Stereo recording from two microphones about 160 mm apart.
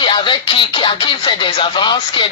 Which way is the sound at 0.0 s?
30° left (ahead or behind).